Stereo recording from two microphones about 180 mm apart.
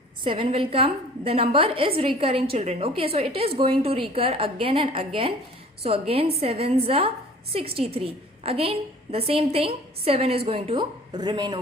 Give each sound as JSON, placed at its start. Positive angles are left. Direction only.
{"t": 0.3, "sound": "a woman's voice", "side_deg": -30}